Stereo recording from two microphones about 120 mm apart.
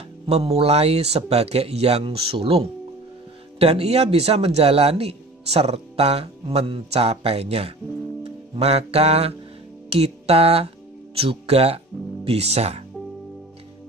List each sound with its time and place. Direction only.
0.3 s speech: 55° right (ahead or behind)
8.2 s music: 55° right (ahead or behind)
11.1 s speech: 55° right (ahead or behind)